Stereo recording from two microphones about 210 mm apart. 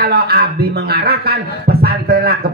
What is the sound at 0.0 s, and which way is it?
A man's voice, 50° right (ahead or behind).